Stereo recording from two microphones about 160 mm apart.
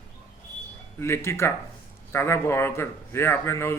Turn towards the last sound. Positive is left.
turn(degrees=15)  # may be behind; listen again after turning